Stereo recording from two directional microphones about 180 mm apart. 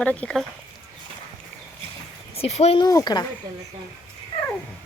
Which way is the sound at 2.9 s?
20° left (ahead or behind).